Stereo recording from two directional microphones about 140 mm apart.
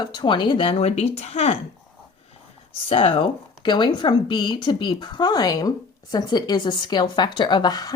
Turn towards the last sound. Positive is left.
turn(degrees=30)  # may be behind; listen again after turning